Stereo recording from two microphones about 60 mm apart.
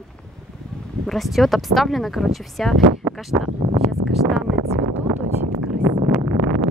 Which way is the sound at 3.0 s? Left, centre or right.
Right.